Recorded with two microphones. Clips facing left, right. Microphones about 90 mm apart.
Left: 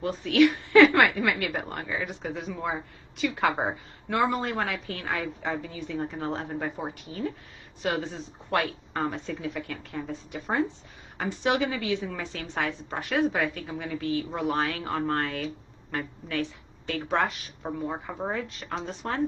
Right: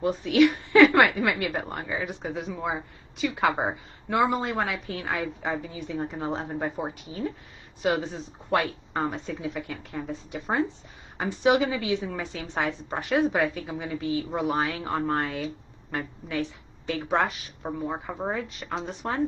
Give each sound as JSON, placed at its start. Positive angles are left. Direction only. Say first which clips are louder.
{"t": 0.0, "sound": "a sound", "louder": "right 1 dB", "side_deg": -15}
{"t": 1.1, "sound": "a woman's voice", "louder": "right 1 dB", "side_deg": -10}
{"t": 8.6, "sound": "a woman's voice", "louder": "right 1 dB", "side_deg": -5}